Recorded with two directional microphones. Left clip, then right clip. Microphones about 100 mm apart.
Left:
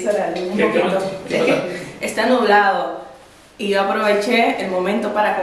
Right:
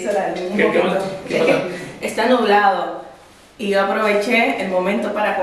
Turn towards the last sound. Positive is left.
turn(degrees=15)  # may be behind; listen again after turning